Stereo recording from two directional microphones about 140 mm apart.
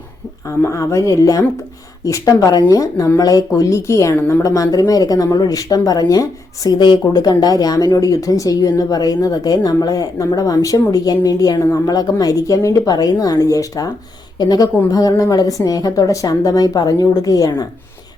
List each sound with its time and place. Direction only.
0.4 s speech: 20° left (ahead or behind)